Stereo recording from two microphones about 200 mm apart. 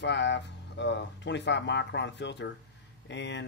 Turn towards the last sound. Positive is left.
turn(degrees=65)  # may be behind; listen again after turning